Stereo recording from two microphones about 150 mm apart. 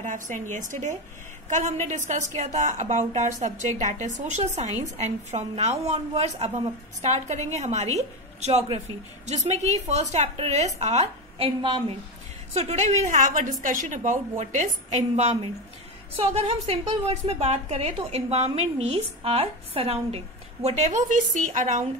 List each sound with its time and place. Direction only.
0.0 s a woman's voice: 55° right (ahead or behind)